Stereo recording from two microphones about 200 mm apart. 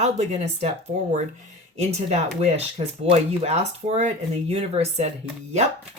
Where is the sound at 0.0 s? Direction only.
35° right (ahead or behind).